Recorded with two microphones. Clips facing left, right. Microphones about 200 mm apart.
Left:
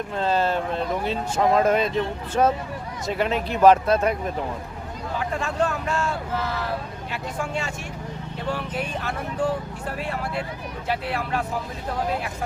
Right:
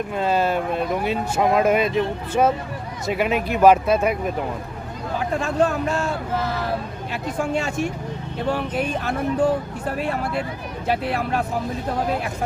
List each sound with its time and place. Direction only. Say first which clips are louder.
0.1 s speech: right 1 dB; 10° right (ahead or behind)
5.4 s speech: right 6 dB; 40° right (ahead or behind)
10.8 s speech: right 4 dB; 45° right (ahead or behind)